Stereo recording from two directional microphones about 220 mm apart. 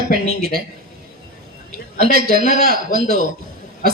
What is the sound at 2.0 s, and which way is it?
A man's voice, 45° right (ahead or behind).